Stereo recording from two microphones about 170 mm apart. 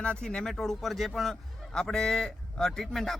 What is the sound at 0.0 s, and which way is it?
A man's voice, 5° left (ahead or behind).